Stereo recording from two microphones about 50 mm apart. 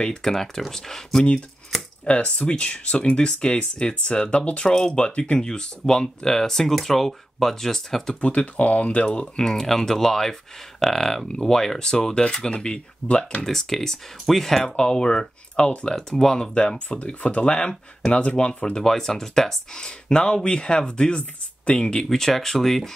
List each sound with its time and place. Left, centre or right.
0.0 s speech: centre
1.7 s chopping: centre
2.0 s speech: left
8.2 s speech: left
9.5 s speech: centre
13.5 s speech: centre
14.8 s speech: centre
22.1 s speech: centre